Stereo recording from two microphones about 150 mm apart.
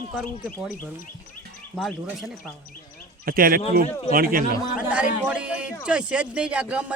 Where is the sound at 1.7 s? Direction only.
Centre (ahead or behind).